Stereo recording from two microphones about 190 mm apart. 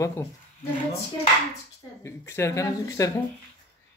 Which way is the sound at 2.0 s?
15° left (ahead or behind).